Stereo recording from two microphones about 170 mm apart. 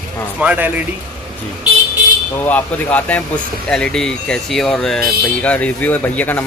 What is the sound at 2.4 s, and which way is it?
Speech, 10° left (ahead or behind).